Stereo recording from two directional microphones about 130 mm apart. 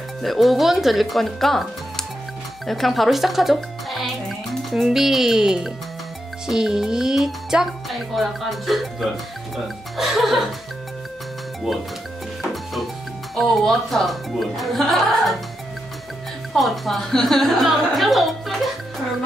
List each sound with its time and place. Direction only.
0.2 s a child's voice: centre (ahead or behind)
13.4 s speech: centre (ahead or behind)
16.5 s speech: centre (ahead or behind)